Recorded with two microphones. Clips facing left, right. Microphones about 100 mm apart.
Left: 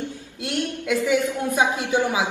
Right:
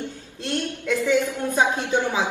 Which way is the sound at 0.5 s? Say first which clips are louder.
Left 1 dB; 15° left (ahead or behind).